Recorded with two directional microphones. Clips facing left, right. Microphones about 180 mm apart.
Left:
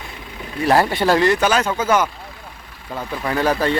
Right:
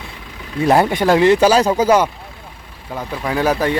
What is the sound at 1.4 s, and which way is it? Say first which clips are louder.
Speech: right 6 dB; 30° right (ahead or behind).